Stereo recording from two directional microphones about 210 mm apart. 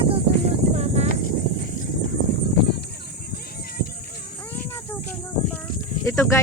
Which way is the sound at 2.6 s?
55° left (ahead or behind).